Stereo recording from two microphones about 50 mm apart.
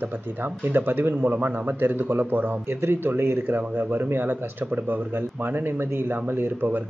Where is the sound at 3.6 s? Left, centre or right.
Right.